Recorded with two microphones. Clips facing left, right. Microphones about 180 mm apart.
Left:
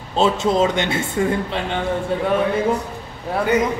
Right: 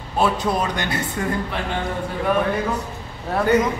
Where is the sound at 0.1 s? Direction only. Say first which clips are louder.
Left 3 dB; 25° left (ahead or behind).